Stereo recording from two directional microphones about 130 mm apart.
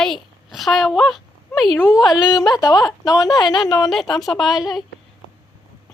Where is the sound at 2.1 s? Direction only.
30° left (ahead or behind).